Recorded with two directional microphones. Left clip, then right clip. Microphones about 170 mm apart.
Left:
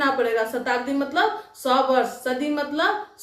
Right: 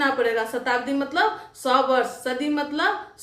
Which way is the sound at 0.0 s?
15° right (ahead or behind).